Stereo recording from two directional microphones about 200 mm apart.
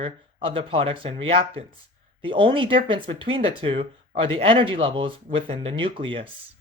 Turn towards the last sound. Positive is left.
turn(degrees=-25)  # may be behind; listen again after turning